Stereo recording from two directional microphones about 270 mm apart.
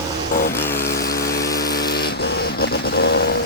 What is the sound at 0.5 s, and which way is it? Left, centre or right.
Vehicle, centre.